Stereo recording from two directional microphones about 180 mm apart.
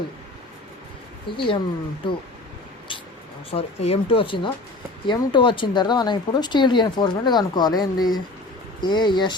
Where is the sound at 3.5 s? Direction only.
35° left (ahead or behind).